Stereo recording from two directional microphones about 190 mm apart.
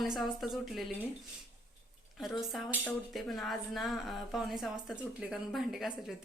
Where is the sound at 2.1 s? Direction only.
Centre (ahead or behind).